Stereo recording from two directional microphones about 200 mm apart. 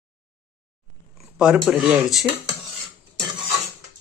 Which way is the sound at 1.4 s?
Centre (ahead or behind).